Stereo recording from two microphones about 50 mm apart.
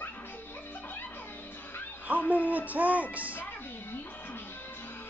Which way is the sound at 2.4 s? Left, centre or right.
Right.